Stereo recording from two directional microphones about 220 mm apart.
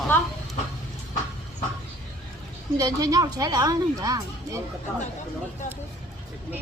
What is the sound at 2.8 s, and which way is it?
A woman's voice, 15° right (ahead or behind).